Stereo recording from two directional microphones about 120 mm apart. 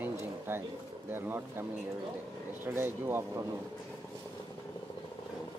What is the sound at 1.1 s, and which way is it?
Speech, 20° right (ahead or behind).